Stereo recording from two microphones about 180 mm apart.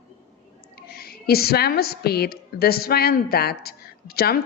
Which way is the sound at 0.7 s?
60° left (ahead or behind).